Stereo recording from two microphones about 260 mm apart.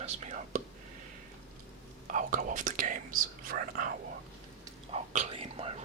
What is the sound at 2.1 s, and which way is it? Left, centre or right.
Speech, right.